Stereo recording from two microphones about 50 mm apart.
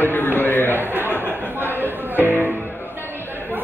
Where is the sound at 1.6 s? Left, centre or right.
Right.